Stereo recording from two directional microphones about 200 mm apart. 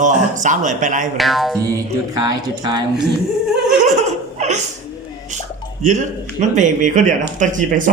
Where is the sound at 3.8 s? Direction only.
35° right (ahead or behind).